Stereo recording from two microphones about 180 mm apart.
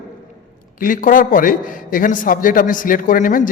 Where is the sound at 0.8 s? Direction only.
50° left (ahead or behind).